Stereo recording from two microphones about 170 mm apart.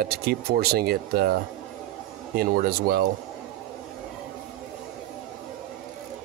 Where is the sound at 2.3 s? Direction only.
60° right (ahead or behind).